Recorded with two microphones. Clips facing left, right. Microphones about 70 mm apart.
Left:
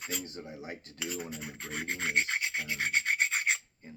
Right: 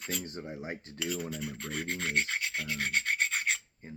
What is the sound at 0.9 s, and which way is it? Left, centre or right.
Filing, centre.